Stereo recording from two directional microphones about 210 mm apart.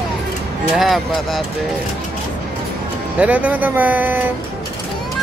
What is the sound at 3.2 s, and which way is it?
Speech, 5° right (ahead or behind).